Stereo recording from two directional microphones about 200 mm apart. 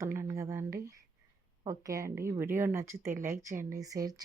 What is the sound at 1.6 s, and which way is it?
A woman's voice, 15° right (ahead or behind).